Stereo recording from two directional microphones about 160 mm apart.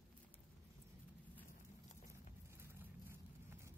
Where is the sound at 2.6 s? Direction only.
15° right (ahead or behind).